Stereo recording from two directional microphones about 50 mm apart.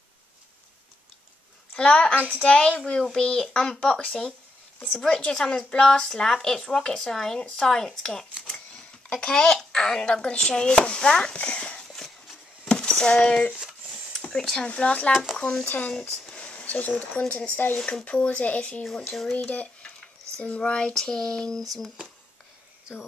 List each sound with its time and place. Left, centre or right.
1.7 s a woman's voice: left
11.3 s speech: left
12.6 s a sound: centre
14.3 s speech: centre
14.7 s speech: left
15.3 s speech: centre
16.3 s a sound: left
17.6 s speech: left
18.0 s speech: left; by 21.9 s centre